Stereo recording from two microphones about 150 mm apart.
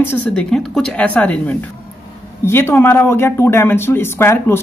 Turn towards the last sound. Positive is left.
turn(degrees=15)  # may be behind; listen again after turning